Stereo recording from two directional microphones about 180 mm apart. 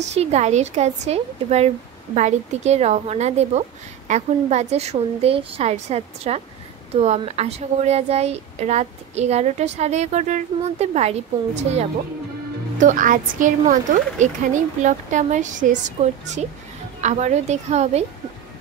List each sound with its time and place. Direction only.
0.0 s a woman's voice: 35° right (ahead or behind)